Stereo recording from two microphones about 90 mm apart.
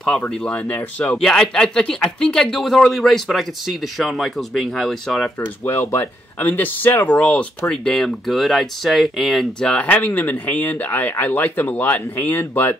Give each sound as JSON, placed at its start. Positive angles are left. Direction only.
{"t": 0.3, "sound": "speech", "side_deg": 10}
{"t": 5.7, "sound": "speech", "side_deg": 25}
{"t": 9.7, "sound": "speech", "side_deg": 15}